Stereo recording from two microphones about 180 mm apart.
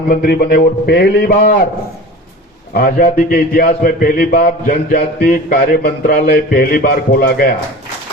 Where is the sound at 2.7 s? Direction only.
55° left (ahead or behind).